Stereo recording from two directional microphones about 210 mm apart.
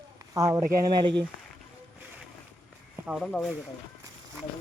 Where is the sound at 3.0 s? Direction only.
Centre (ahead or behind).